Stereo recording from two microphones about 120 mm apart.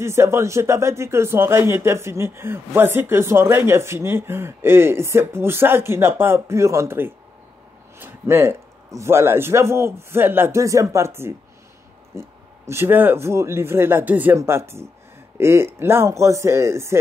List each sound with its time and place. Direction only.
0.0 s speech: 20° right (ahead or behind)